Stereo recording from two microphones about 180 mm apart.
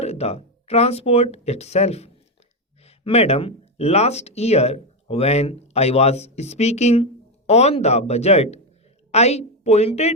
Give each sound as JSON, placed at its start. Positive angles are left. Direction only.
{"t": 0.0, "sound": "a woman's voice", "side_deg": 35}